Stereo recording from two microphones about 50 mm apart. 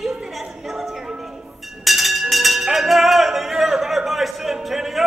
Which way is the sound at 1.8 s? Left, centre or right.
Centre.